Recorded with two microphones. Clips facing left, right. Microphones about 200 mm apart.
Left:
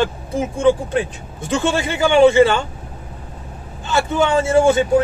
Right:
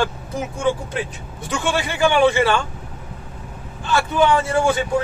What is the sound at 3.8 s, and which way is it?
Speech, 25° left (ahead or behind).